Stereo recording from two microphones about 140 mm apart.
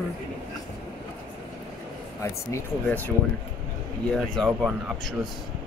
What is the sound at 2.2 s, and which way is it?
Speech, 15° left (ahead or behind).